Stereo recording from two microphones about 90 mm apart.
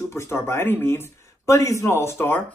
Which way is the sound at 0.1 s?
30° left (ahead or behind).